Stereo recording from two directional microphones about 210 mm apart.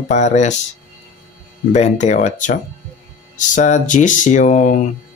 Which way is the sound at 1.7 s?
35° left (ahead or behind).